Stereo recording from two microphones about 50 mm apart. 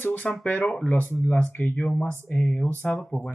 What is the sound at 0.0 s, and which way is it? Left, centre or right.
Speech, left.